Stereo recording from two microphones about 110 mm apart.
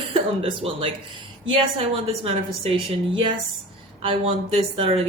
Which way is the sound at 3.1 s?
45° right (ahead or behind).